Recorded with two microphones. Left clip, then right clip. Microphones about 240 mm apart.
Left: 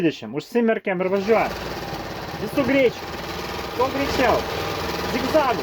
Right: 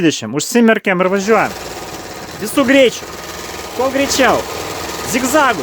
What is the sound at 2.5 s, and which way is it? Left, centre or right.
Speech, right.